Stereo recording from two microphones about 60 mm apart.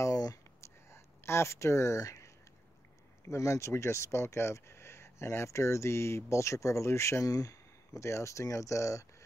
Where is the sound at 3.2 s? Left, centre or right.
Left.